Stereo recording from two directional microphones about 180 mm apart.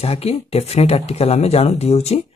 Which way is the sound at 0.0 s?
35° left (ahead or behind).